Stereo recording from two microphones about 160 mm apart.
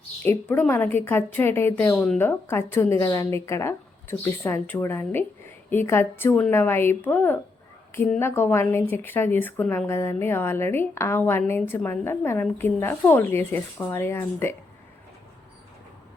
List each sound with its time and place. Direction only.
0.3 s a woman's voice: 10° left (ahead or behind)